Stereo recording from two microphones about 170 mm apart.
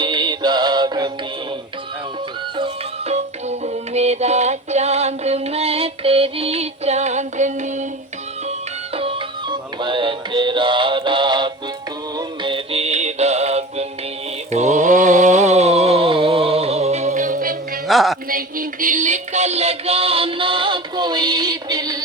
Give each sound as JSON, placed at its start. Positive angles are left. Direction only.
{"t": 0.0, "sound": "music", "side_deg": -25}
{"t": 2.6, "sound": "music", "side_deg": -40}
{"t": 9.0, "sound": "music", "side_deg": -30}
{"t": 14.5, "sound": "mantra", "side_deg": -45}
{"t": 17.8, "sound": "music", "side_deg": 0}
{"t": 18.3, "sound": "music", "side_deg": -55}